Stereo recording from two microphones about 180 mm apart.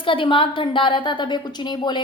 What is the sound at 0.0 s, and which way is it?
A woman's voice, 30° left (ahead or behind).